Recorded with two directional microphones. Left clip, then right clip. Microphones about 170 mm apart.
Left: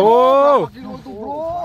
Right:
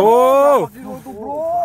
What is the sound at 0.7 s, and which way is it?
Speech, 40° right (ahead or behind).